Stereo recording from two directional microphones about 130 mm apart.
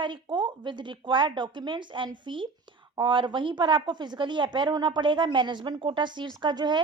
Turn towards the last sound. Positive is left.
turn(degrees=-35)  # may be behind; listen again after turning